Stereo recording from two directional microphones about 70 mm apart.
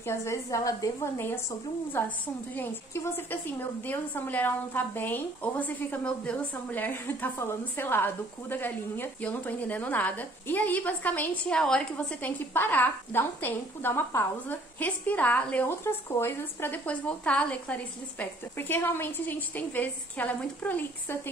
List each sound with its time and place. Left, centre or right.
0.0 s a woman's voice: left
1.1 s speech: left
2.5 s a woman's voice: left
11.5 s a woman's voice: centre
12.2 s a woman's voice: left
15.6 s speech: left
16.8 s a woman's voice: centre